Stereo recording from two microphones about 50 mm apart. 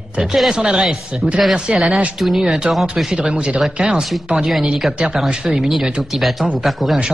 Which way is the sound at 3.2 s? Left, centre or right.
Right.